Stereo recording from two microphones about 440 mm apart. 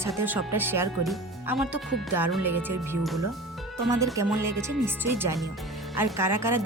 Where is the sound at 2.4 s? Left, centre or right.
Right.